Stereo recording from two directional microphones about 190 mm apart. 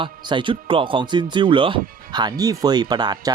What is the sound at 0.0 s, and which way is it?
Speech, 25° right (ahead or behind).